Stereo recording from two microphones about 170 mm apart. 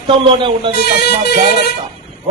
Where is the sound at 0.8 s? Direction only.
70° left (ahead or behind).